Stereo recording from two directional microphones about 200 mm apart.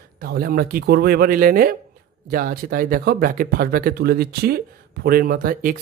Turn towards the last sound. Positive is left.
turn(degrees=-45)  # may be behind; listen again after turning